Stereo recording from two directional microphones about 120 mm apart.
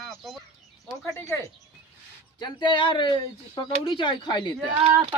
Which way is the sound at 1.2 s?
25° left (ahead or behind).